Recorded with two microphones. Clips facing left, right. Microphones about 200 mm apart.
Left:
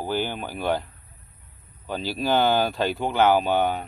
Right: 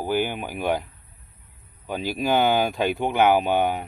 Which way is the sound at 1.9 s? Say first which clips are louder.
Right 1 dB; 15° right (ahead or behind).